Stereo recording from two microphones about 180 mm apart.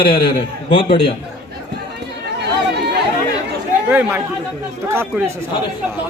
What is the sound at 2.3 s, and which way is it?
Chatter, 70° right (ahead or behind).